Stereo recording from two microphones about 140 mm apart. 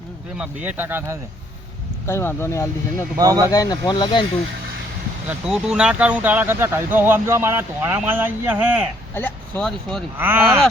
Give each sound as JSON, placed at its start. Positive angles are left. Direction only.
{"t": 0.3, "sound": "speech", "side_deg": -10}
{"t": 2.0, "sound": "speech", "side_deg": 15}
{"t": 3.2, "sound": "speech", "side_deg": -25}
{"t": 3.5, "sound": "speech", "side_deg": 25}
{"t": 5.3, "sound": "speech", "side_deg": -5}
{"t": 9.1, "sound": "speech", "side_deg": 10}
{"t": 10.2, "sound": "speech", "side_deg": -15}